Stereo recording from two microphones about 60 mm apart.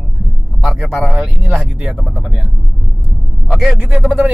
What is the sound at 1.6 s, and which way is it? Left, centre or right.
Speech, centre.